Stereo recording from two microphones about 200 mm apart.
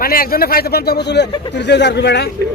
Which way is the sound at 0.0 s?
45° left (ahead or behind).